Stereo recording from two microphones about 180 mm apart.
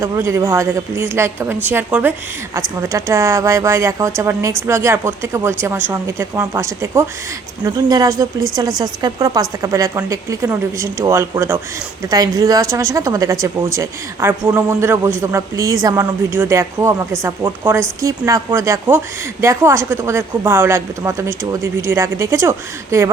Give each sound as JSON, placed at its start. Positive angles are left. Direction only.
{"t": 0.0, "sound": "a woman's voice", "side_deg": -15}